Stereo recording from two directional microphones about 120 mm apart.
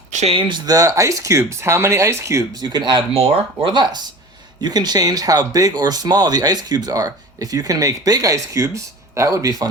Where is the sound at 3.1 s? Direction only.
55° right (ahead or behind).